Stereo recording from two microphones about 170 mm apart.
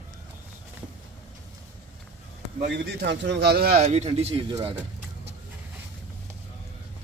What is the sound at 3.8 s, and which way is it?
Speech, 40° right (ahead or behind).